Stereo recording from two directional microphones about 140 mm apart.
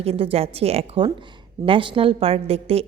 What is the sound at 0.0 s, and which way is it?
A woman's voice, 45° right (ahead or behind).